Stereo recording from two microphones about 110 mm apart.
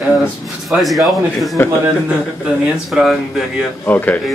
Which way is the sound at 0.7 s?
Centre (ahead or behind).